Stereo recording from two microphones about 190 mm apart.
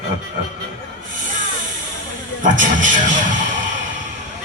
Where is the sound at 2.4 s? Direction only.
45° right (ahead or behind).